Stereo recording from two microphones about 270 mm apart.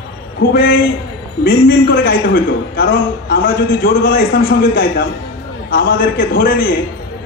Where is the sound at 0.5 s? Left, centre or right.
Left.